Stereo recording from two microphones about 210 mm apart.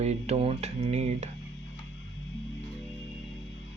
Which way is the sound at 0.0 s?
30° right (ahead or behind).